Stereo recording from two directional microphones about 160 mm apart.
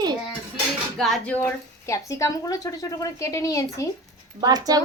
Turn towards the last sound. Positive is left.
turn(degrees=-25)  # may be behind; listen again after turning